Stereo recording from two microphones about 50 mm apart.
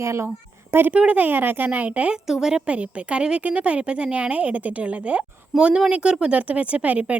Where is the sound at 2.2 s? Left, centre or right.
Centre.